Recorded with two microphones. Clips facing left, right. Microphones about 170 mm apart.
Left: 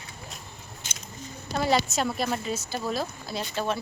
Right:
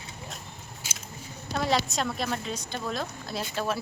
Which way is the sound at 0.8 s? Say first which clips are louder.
Right 1 dB; 10° right (ahead or behind).